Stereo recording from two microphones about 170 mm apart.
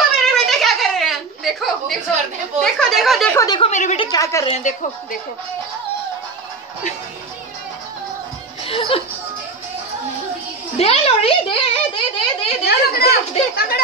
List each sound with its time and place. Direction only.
0.3 s a sound: centre (ahead or behind)
2.6 s speech: centre (ahead or behind)
3.3 s a woman's voice: 25° left (ahead or behind)
3.6 s a woman's voice: 40° left (ahead or behind)
4.0 s a woman's voice: 20° left (ahead or behind)
4.5 s speech: 45° left (ahead or behind)
8.6 s speech: 30° left (ahead or behind)
10.8 s a sound: 35° left (ahead or behind)
12.6 s a child's voice: 65° left (ahead or behind)